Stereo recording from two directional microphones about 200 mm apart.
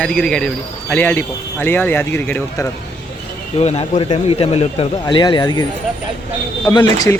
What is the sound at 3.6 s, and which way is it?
A man's voice, 30° left (ahead or behind).